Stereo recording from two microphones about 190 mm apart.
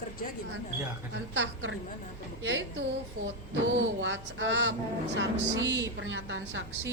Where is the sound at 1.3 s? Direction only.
75° right (ahead or behind).